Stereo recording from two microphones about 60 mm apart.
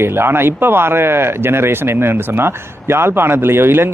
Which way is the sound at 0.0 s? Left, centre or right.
Right.